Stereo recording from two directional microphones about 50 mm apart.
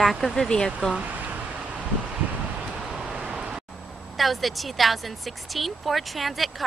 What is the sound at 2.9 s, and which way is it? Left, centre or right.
Vehicle, centre.